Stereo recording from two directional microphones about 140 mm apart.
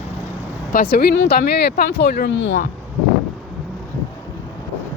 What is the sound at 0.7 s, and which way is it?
Speech, 90° left.